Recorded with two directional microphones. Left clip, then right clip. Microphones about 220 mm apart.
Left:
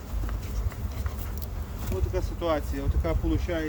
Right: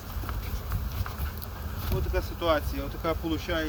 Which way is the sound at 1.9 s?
25° left (ahead or behind).